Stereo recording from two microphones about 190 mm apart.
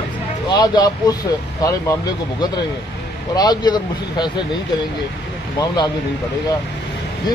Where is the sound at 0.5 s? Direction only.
20° left (ahead or behind).